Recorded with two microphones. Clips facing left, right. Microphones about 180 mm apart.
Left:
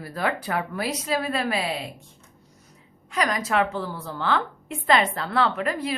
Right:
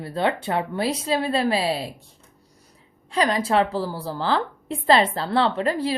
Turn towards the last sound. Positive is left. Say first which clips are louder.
# right 3 dB
turn(degrees=-30)  # may be behind; listen again after turning